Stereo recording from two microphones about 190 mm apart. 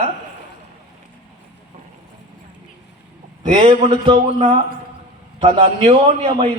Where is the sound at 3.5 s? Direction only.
30° right (ahead or behind).